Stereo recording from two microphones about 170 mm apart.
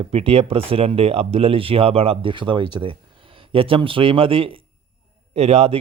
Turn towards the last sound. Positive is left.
turn(degrees=-35)  # may be behind; listen again after turning